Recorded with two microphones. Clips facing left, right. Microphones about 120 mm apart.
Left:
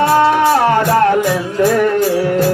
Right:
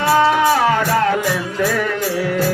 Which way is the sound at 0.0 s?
45° left (ahead or behind).